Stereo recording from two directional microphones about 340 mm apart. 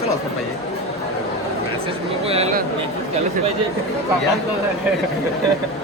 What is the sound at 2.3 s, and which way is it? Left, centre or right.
Speech, centre.